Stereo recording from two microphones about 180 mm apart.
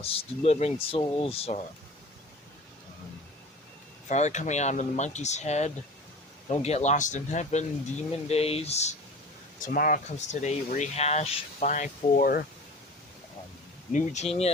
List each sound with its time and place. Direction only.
0.0 s speech: 30° left (ahead or behind)
4.1 s speech: 40° left (ahead or behind)
9.6 s speech: 50° left (ahead or behind)
13.9 s speech: 40° left (ahead or behind)